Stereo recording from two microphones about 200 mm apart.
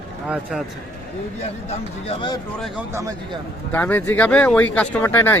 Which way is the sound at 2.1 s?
25° left (ahead or behind).